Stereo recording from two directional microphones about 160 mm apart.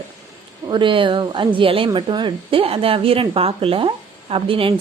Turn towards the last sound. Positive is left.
turn(degrees=-35)  # may be behind; listen again after turning